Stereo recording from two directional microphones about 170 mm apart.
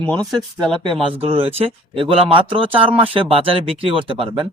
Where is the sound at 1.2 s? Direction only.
35° right (ahead or behind).